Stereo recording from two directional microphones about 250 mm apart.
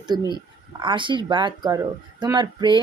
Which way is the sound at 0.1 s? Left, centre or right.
Centre.